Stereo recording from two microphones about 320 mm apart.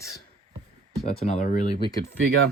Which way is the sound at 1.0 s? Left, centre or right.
Left.